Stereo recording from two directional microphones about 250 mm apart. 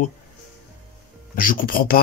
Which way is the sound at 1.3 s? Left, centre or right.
Left.